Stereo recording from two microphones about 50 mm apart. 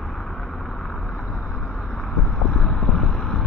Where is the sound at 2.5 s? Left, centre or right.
Centre.